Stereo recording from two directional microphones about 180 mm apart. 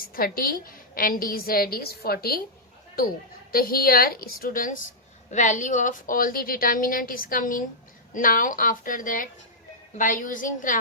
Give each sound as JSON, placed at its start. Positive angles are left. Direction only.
{"t": 0.0, "sound": "a woman's voice", "side_deg": 55}
{"t": 3.5, "sound": "a woman's voice", "side_deg": 55}